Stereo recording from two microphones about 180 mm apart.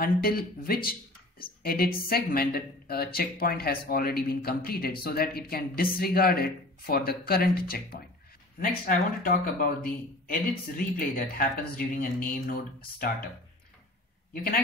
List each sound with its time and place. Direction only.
0.0 s a woman's voice: 55° left (ahead or behind)
14.3 s a man's voice: 55° left (ahead or behind)